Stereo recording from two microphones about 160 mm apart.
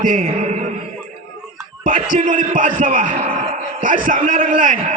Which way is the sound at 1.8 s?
55° right (ahead or behind).